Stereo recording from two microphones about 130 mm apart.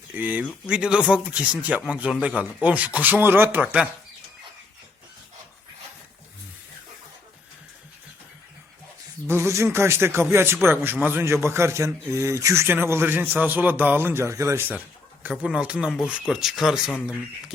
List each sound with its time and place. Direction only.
0.1 s speech: 15° right (ahead or behind)
9.2 s a man's voice: 20° right (ahead or behind); by 16.9 s 5° right (ahead or behind)